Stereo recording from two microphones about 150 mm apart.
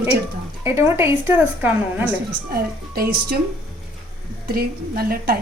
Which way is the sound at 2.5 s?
90° right.